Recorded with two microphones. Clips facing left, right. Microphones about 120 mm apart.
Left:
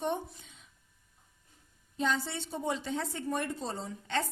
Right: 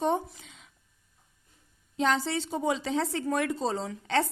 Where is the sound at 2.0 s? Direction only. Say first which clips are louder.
Right 5 dB; 90° right.